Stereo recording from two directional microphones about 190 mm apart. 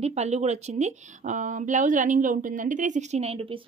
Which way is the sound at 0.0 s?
35° right (ahead or behind).